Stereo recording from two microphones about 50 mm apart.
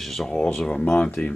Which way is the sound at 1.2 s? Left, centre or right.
Left.